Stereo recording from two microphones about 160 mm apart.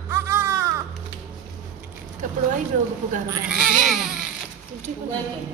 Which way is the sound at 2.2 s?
50° right (ahead or behind).